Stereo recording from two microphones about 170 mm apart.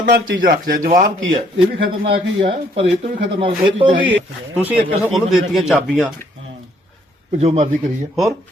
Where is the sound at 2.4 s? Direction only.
30° right (ahead or behind).